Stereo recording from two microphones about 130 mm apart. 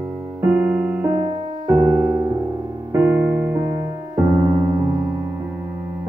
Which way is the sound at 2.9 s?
10° right (ahead or behind).